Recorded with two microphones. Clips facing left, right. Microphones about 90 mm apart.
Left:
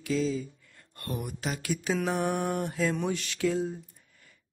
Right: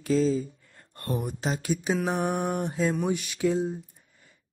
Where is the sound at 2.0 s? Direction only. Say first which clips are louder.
Even; 15° right (ahead or behind).